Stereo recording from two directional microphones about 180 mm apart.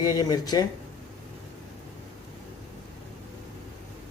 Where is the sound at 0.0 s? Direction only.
20° left (ahead or behind).